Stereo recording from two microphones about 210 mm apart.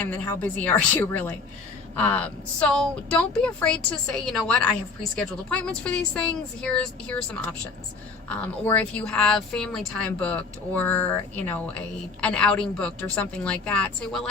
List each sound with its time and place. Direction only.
0.0 s a woman's voice: 10° left (ahead or behind)
8.4 s a woman's voice: 5° left (ahead or behind)